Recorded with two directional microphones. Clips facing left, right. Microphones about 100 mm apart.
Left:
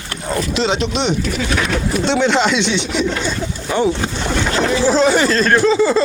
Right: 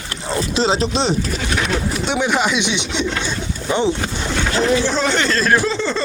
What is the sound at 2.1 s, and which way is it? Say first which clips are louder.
Speech: left 3 dB; 10° right (ahead or behind).